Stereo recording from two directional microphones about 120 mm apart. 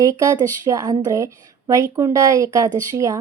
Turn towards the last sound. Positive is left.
turn(degrees=-25)  # may be behind; listen again after turning